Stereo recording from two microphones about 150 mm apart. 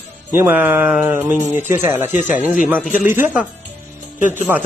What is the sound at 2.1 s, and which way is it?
Speech, 55° left (ahead or behind).